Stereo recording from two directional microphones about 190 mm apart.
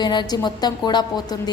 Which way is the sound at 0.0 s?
25° left (ahead or behind).